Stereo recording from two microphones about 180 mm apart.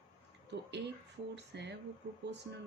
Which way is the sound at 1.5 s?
70° right (ahead or behind).